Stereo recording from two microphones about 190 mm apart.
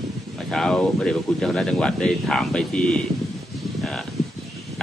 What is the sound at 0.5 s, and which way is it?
Speech, 5° left (ahead or behind).